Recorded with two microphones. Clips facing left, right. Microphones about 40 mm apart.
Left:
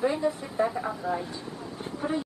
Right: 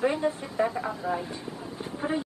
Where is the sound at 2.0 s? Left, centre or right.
Right.